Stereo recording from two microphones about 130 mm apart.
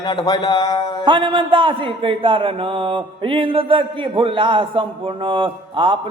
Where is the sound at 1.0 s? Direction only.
40° right (ahead or behind).